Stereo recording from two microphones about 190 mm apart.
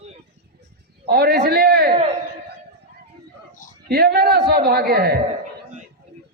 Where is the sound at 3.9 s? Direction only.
55° right (ahead or behind).